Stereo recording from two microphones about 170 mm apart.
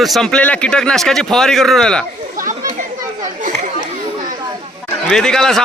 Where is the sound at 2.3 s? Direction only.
50° right (ahead or behind).